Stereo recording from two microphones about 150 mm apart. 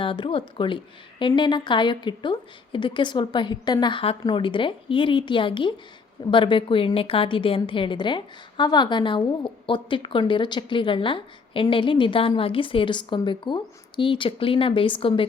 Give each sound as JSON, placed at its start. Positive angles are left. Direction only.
{"t": 0.0, "sound": "a woman's voice", "side_deg": 35}